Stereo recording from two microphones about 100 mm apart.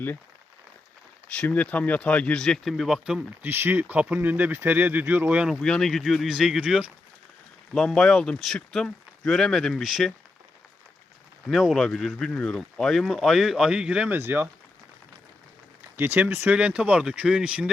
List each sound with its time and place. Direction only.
1.3 s speech: 15° left (ahead or behind); by 3.3 s 5° right (ahead or behind)
3.4 s speech: 20° right (ahead or behind)
5.5 s speech: 5° left (ahead or behind)
7.7 s speech: 5° left (ahead or behind)
11.4 s speech: centre (ahead or behind); by 14.5 s 20° right (ahead or behind)
16.0 s speech: 20° right (ahead or behind)